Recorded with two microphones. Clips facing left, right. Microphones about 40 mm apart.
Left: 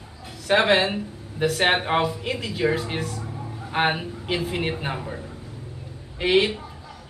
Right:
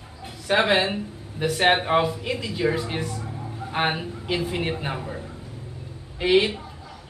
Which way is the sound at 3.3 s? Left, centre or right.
Centre.